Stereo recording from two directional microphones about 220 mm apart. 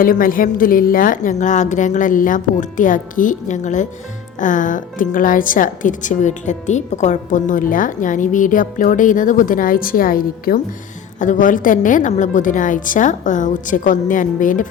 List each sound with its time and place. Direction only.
0.0 s a woman's voice: 40° left (ahead or behind)